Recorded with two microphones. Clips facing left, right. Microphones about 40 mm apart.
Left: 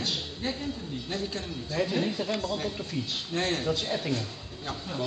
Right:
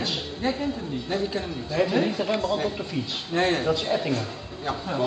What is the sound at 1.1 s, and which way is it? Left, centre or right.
A man's voice, centre.